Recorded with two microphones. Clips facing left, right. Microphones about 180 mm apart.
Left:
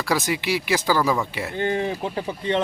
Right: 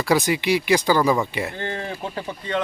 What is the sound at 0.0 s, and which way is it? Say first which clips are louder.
Speech: right 4 dB; centre (ahead or behind).